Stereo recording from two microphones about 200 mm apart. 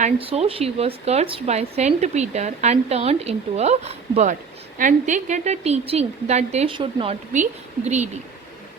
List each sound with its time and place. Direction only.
0.0 s a woman's voice: 30° right (ahead or behind)